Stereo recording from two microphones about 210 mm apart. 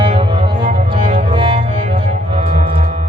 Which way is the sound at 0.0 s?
25° right (ahead or behind).